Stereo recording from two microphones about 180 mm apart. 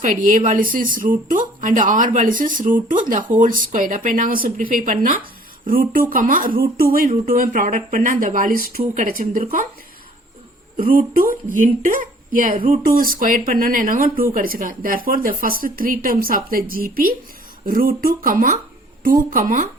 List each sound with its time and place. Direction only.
0.0 s speech: 45° right (ahead or behind)
10.8 s speech: 50° right (ahead or behind)